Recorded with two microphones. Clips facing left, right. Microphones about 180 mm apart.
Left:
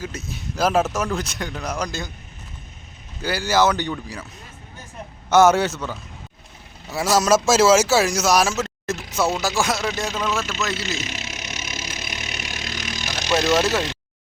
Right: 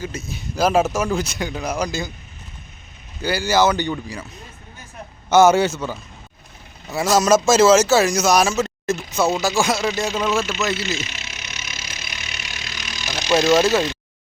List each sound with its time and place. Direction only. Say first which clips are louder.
0.3 s speech: right 2 dB; centre (ahead or behind)
3.2 s speech: right 2 dB; centre (ahead or behind)
5.3 s speech: right 2 dB; centre (ahead or behind)
10.9 s vehicle: even; 40° left (ahead or behind)
13.6 s speech: right 4 dB; centre (ahead or behind)